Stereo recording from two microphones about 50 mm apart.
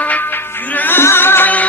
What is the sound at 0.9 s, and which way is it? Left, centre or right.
Music, left.